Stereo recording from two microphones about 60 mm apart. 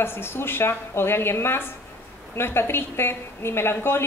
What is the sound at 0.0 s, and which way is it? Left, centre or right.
A woman's voice, left.